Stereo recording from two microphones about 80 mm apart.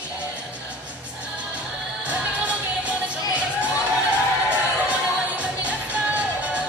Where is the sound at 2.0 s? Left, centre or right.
Centre.